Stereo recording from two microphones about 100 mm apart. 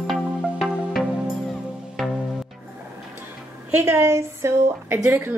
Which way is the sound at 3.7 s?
25° right (ahead or behind).